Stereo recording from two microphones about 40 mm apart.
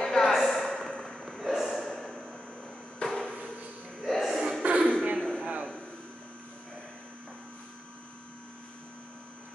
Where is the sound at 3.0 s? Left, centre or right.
Centre.